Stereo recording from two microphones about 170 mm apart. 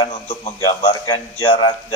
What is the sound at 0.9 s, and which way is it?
Speech, 25° left (ahead or behind).